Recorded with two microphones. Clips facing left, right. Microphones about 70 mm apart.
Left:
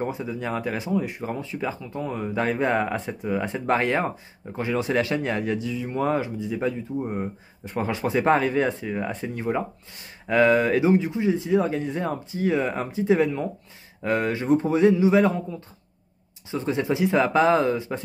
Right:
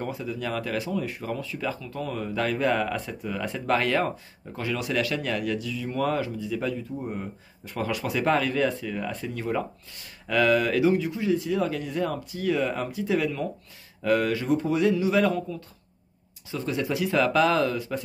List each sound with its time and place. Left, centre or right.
0.0 s speech: left